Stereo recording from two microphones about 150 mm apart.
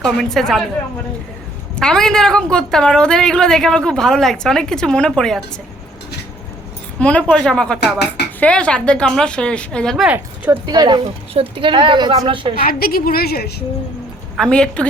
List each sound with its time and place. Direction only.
0.0 s a woman's voice: 5° left (ahead or behind)
1.7 s a woman's voice: 5° left (ahead or behind)
7.0 s a woman's voice: 10° left (ahead or behind)
7.8 s speech: 90° left
8.4 s a woman's voice: 5° left (ahead or behind)
10.1 s speech: 10° right (ahead or behind)
10.7 s a woman's voice: 30° right (ahead or behind)
12.6 s a woman's voice: 75° left (ahead or behind)
14.3 s a woman's voice: 5° left (ahead or behind)